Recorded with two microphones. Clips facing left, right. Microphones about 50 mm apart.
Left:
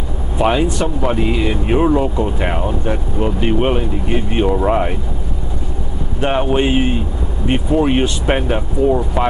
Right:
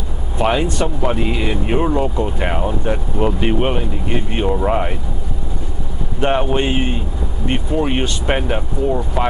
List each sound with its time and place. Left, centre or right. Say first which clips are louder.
0.4 s speech: left 2 dB; centre
3.5 s speech: left 2 dB; centre
6.2 s speech: left 1 dB; centre